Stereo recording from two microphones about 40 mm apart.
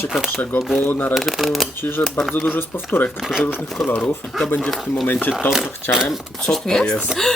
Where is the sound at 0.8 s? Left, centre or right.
Left.